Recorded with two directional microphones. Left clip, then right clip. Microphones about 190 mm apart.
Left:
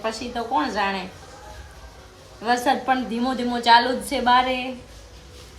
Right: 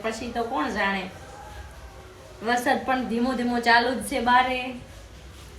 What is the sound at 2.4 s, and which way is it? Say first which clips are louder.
A woman's voice: left 3 dB; 15° left (ahead or behind).